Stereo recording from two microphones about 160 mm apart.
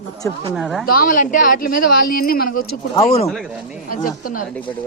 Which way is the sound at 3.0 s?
40° left (ahead or behind).